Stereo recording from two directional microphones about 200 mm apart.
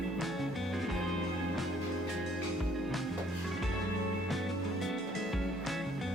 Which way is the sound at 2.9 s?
Centre (ahead or behind).